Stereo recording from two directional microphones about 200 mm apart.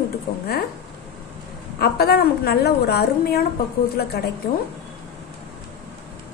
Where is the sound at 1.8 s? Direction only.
50° left (ahead or behind).